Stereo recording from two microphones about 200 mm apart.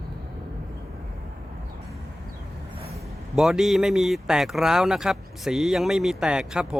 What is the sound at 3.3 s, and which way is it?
Speech, centre (ahead or behind).